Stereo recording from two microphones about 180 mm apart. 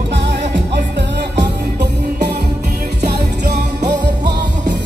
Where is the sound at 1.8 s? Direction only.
65° right (ahead or behind).